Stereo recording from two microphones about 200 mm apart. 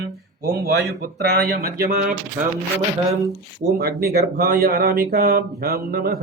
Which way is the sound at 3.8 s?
50° right (ahead or behind).